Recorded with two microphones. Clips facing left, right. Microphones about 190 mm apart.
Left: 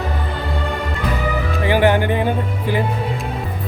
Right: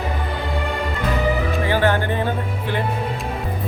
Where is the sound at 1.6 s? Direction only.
15° left (ahead or behind).